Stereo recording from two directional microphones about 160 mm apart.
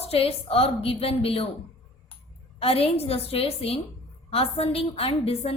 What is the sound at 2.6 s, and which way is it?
A woman's voice, 35° left (ahead or behind).